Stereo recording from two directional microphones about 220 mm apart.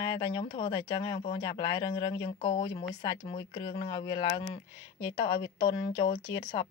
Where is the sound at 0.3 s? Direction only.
25° left (ahead or behind).